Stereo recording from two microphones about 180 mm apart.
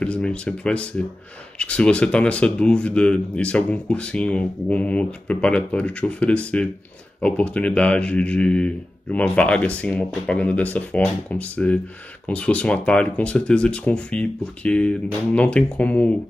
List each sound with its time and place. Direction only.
0.0 s a man's voice: 5° left (ahead or behind)